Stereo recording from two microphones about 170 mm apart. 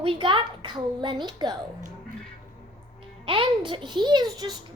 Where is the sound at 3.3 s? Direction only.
30° right (ahead or behind).